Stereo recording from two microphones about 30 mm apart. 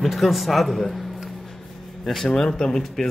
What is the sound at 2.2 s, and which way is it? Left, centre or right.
Speech, centre.